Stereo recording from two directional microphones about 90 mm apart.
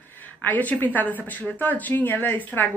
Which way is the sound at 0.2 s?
20° left (ahead or behind).